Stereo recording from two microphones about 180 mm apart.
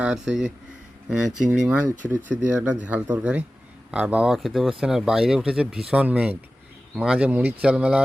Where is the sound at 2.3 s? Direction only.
5° right (ahead or behind).